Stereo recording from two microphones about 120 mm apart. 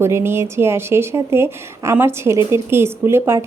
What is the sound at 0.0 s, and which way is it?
A woman's voice, 20° right (ahead or behind).